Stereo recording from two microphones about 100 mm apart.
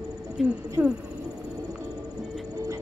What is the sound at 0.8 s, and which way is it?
Speech, 10° right (ahead or behind).